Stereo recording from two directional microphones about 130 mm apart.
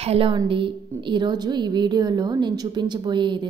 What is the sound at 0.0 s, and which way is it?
A woman's voice, 50° right (ahead or behind).